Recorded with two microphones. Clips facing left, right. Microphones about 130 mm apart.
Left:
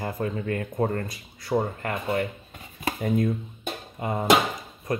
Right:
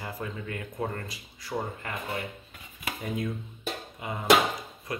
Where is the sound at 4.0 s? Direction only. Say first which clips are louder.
Left 9 dB; 40° left (ahead or behind).